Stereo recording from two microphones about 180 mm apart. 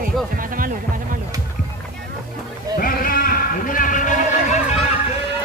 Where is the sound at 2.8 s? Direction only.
55° left (ahead or behind).